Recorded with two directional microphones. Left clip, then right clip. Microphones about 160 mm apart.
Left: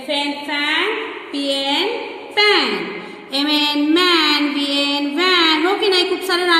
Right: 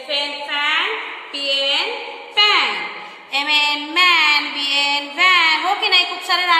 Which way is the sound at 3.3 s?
10° left (ahead or behind).